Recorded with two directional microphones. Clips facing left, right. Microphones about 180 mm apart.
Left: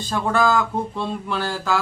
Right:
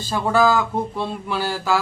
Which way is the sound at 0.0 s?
5° right (ahead or behind).